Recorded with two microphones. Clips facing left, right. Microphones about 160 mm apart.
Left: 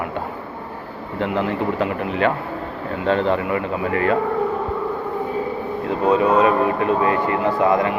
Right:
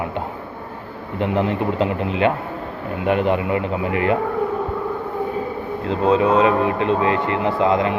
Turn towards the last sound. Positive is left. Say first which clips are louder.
# even
turn(degrees=-20)  # may be behind; listen again after turning